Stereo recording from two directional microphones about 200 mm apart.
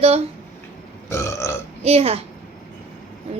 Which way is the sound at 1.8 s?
30° right (ahead or behind).